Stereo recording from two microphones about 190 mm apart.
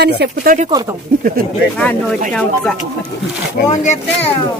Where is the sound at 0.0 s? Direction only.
65° right (ahead or behind).